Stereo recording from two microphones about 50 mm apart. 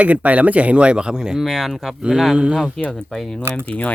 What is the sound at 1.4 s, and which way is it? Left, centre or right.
Speech, centre.